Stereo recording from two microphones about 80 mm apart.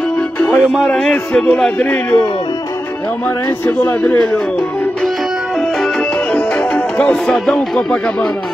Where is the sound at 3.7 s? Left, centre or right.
Left.